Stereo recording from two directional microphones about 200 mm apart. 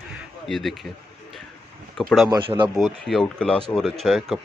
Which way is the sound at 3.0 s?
5° left (ahead or behind).